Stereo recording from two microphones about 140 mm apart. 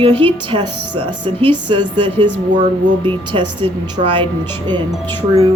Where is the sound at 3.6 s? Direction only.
40° right (ahead or behind).